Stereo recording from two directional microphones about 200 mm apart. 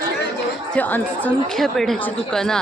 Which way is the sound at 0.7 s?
5° left (ahead or behind).